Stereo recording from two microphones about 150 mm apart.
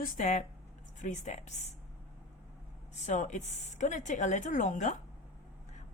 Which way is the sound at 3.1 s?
55° left (ahead or behind).